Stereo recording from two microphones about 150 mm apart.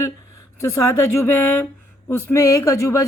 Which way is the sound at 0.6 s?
20° left (ahead or behind).